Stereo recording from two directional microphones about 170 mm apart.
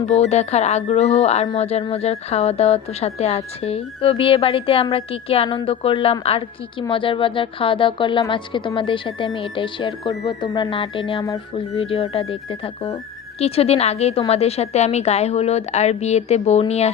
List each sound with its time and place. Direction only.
0.0 s speech: 40° left (ahead or behind)